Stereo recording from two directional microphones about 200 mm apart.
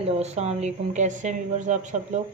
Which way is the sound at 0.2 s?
35° right (ahead or behind).